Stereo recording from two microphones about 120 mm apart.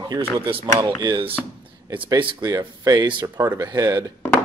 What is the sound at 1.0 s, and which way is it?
Speech, 45° right (ahead or behind).